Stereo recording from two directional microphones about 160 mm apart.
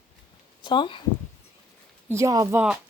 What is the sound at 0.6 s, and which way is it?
Speech, 30° left (ahead or behind).